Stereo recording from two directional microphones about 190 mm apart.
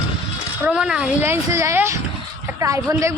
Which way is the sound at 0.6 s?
5° right (ahead or behind).